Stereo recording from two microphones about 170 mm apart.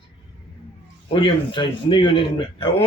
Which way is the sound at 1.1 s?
30° left (ahead or behind).